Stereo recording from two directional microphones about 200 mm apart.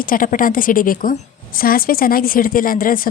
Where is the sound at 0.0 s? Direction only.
45° left (ahead or behind).